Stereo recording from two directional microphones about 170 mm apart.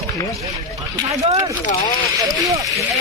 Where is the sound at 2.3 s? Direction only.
20° right (ahead or behind).